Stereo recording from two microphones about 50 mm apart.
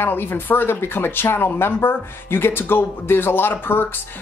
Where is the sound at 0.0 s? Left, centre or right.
Left.